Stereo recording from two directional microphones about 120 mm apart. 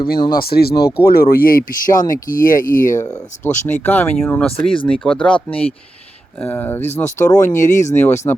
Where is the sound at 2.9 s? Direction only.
25° left (ahead or behind).